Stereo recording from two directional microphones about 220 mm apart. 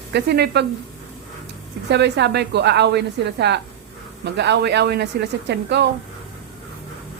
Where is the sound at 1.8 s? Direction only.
50° right (ahead or behind).